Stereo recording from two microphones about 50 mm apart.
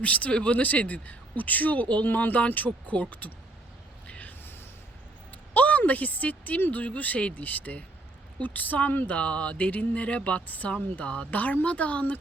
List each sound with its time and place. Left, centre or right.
0.0 s speech: left
4.0 s a sound: left
6.7 s speech: left
9.1 s speech: left